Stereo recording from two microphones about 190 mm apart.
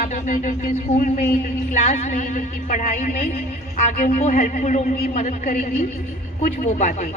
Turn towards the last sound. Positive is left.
turn(degrees=40)  # may be behind; listen again after turning